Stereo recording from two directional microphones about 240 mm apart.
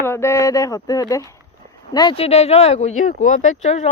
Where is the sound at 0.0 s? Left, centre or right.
Centre.